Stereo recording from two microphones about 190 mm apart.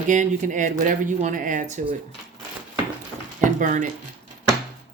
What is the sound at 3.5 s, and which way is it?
Speech, 45° right (ahead or behind).